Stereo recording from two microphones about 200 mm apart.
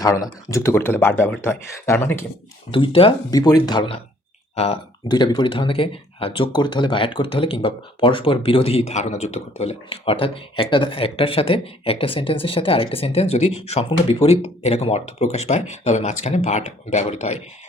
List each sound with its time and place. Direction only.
0.0 s speech: 15° left (ahead or behind)
2.7 s speech: 25° left (ahead or behind)